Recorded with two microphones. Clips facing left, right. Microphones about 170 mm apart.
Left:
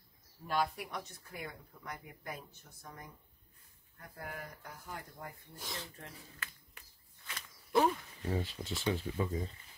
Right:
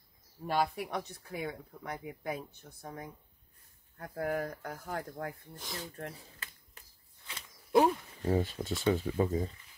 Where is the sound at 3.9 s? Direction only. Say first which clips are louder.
Right 12 dB; 90° right.